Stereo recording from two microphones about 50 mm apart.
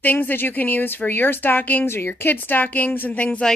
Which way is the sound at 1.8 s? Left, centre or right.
Left.